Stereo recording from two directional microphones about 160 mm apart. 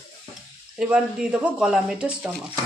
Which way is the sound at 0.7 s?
5° right (ahead or behind).